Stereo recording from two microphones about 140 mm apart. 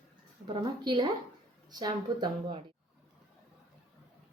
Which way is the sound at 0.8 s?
30° right (ahead or behind).